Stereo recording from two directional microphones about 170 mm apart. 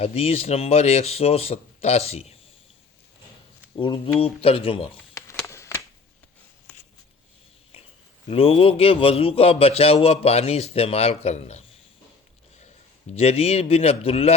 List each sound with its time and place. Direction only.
0.0 s a man's voice: 35° left (ahead or behind)
3.8 s a man's voice: 30° left (ahead or behind)
5.1 s a sound: 15° left (ahead or behind)
8.3 s a man's voice: 35° left (ahead or behind)
13.1 s a man's voice: 35° left (ahead or behind)